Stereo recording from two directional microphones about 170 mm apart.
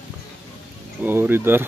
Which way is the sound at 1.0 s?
10° right (ahead or behind).